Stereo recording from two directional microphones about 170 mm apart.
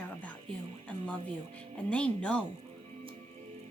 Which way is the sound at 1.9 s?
5° left (ahead or behind).